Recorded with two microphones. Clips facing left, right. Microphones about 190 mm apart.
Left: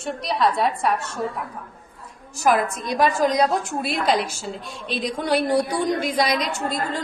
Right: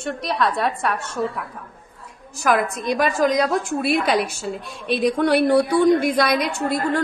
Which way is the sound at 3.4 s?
60° right (ahead or behind).